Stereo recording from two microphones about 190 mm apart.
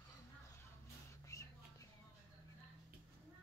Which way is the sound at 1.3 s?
15° left (ahead or behind).